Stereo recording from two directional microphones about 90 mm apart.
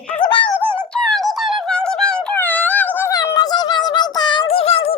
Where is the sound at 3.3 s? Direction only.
55° left (ahead or behind); by 5.0 s 90° left.